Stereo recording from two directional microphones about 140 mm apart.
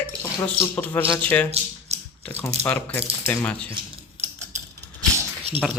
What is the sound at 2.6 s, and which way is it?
Speech, 10° left (ahead or behind).